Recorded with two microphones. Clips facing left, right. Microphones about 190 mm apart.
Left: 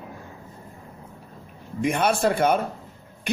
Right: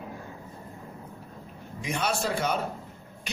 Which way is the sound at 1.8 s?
55° left (ahead or behind).